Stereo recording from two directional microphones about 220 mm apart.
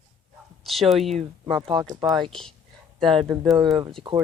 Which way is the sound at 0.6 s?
Centre (ahead or behind).